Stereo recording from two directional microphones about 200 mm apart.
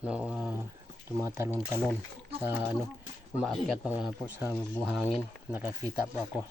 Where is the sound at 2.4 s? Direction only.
10° right (ahead or behind).